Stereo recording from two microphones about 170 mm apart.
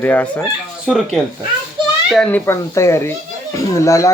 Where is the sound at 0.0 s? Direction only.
10° left (ahead or behind).